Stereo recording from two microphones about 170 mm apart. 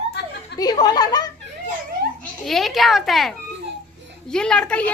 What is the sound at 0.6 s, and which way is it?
Speech, 25° left (ahead or behind).